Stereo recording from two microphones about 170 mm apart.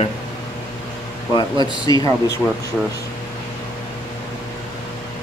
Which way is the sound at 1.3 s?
25° left (ahead or behind).